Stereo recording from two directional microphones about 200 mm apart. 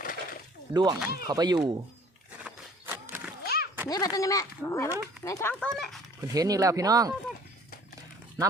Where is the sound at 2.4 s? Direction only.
10° right (ahead or behind).